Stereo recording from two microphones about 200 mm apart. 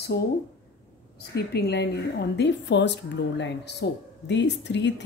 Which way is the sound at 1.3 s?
55° left (ahead or behind).